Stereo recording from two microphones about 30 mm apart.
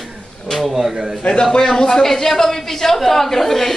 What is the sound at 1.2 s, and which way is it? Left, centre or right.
Speech, left.